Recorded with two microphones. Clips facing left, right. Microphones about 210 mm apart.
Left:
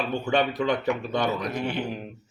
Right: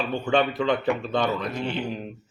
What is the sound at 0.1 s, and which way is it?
Speech, 15° left (ahead or behind).